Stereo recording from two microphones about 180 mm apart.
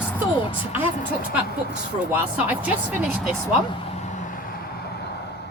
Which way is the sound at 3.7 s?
40° left (ahead or behind).